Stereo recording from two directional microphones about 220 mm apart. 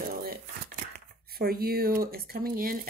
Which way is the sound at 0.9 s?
45° right (ahead or behind).